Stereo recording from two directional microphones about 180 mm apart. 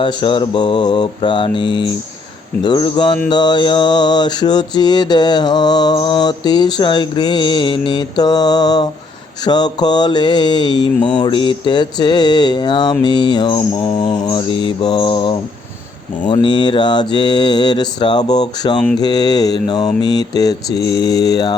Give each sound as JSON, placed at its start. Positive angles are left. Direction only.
{"t": 0.0, "sound": "mantra", "side_deg": 25}